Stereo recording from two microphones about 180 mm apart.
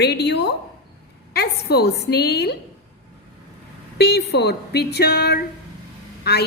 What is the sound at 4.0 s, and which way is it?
A woman's voice, 65° left (ahead or behind).